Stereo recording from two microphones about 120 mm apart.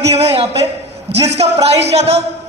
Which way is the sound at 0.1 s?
55° right (ahead or behind).